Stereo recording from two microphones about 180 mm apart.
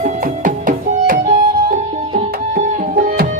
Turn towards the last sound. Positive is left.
turn(degrees=-50)  # may be behind; listen again after turning